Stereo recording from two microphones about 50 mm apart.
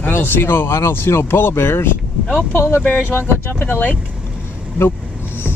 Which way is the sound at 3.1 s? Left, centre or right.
Left.